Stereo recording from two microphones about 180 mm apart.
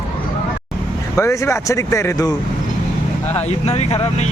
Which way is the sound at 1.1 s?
15° left (ahead or behind).